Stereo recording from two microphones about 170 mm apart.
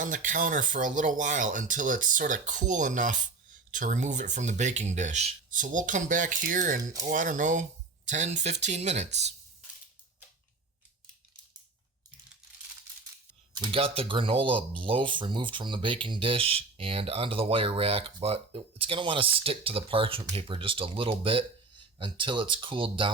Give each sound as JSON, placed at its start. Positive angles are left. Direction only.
{"t": 0.0, "sound": "speech", "side_deg": -50}
{"t": 13.5, "sound": "speech", "side_deg": -30}